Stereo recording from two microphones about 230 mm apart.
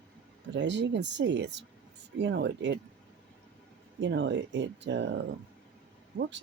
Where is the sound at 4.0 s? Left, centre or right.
Right.